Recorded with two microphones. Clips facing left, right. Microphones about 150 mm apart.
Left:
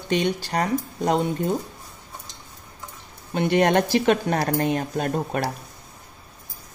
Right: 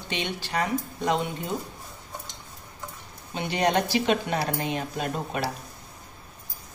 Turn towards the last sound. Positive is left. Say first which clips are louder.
# left 5 dB
turn(degrees=50)  # may be behind; listen again after turning